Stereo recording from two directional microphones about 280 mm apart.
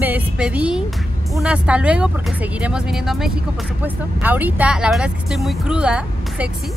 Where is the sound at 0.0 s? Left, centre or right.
Centre.